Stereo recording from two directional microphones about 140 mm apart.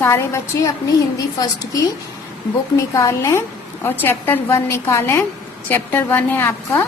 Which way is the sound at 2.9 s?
20° left (ahead or behind).